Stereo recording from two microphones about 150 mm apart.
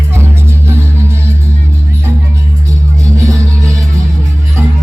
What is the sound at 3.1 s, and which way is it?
Music, 20° right (ahead or behind).